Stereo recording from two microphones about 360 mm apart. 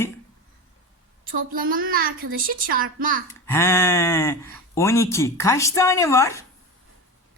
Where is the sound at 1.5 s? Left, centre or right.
Right.